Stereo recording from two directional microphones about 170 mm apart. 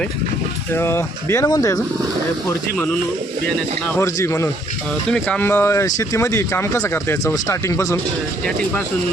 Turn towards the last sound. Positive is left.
turn(degrees=15)  # may be behind; listen again after turning